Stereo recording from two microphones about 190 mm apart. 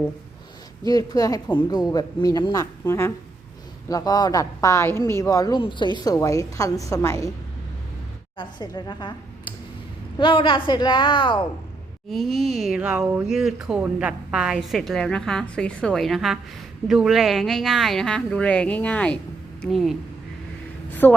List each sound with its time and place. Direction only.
0.9 s speech: 20° left (ahead or behind)
8.4 s speech: 25° left (ahead or behind)
12.1 s speech: centre (ahead or behind)
20.9 s a sound: 10° left (ahead or behind)